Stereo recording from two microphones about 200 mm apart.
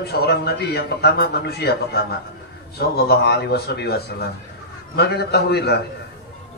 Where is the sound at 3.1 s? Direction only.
50° left (ahead or behind).